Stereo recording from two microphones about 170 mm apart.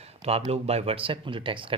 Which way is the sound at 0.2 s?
35° right (ahead or behind).